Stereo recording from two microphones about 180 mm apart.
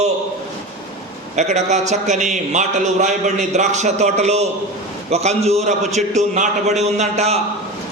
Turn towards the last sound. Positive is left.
turn(degrees=-35)  # may be behind; listen again after turning